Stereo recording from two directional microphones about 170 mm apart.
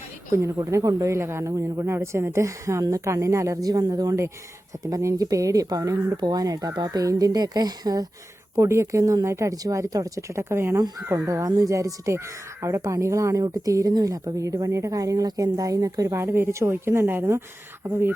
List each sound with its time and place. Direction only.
0.4 s speech: 20° right (ahead or behind)